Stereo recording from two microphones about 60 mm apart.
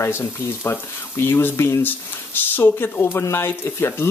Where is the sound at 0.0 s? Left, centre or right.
Left.